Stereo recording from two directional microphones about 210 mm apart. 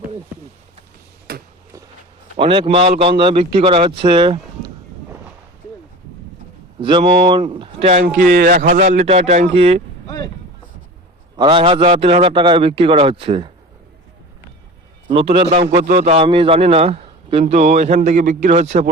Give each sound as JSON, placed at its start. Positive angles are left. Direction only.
{"t": 1.3, "sound": "a sound", "side_deg": -45}
{"t": 2.3, "sound": "a man's voice", "side_deg": -25}
{"t": 6.7, "sound": "a man's voice", "side_deg": -25}
{"t": 8.6, "sound": "speech", "side_deg": -50}
{"t": 8.9, "sound": "a man's voice", "side_deg": -35}
{"t": 11.3, "sound": "a man's voice", "side_deg": -20}
{"t": 15.1, "sound": "a man's voice", "side_deg": -25}